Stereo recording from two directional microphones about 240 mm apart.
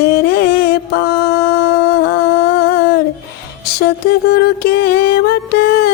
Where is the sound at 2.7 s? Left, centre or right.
Left.